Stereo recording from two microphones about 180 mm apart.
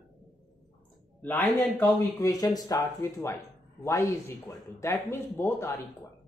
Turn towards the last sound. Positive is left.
turn(degrees=15)  # may be behind; listen again after turning